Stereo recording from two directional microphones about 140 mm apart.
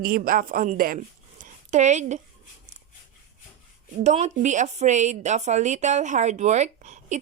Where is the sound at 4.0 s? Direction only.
55° right (ahead or behind).